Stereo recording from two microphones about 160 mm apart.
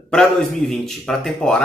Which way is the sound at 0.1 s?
5° left (ahead or behind).